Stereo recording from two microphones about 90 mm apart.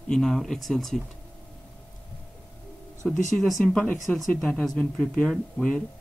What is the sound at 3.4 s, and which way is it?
Speech, centre (ahead or behind).